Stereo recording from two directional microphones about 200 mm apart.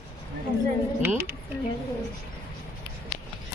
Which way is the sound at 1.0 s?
10° right (ahead or behind).